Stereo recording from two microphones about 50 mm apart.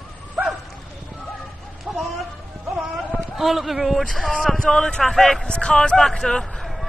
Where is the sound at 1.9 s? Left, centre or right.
Centre.